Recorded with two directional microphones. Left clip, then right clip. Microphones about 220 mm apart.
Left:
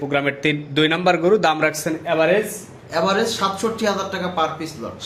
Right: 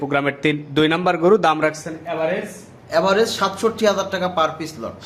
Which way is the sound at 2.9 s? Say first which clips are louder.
Right 2 dB; 45° right (ahead or behind).